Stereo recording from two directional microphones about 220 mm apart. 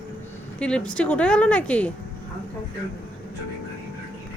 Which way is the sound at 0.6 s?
5° left (ahead or behind).